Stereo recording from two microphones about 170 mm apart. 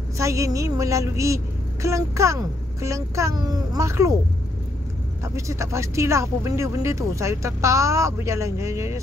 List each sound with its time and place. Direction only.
0.2 s a woman's voice: 20° right (ahead or behind)
5.2 s a woman's voice: 15° right (ahead or behind)